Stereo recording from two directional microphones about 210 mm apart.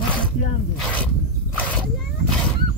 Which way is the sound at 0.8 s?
5° left (ahead or behind).